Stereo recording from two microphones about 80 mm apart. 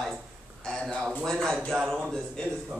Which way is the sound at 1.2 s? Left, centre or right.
Centre.